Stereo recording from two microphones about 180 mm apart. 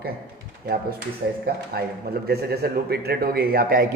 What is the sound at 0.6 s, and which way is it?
A man's voice, 55° right (ahead or behind).